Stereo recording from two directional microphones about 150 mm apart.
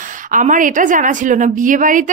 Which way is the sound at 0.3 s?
60° right (ahead or behind).